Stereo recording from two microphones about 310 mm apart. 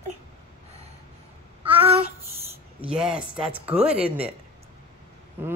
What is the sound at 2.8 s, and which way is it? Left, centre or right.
Speech, centre.